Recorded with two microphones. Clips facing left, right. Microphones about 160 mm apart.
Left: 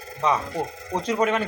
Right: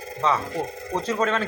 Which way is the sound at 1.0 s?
15° left (ahead or behind).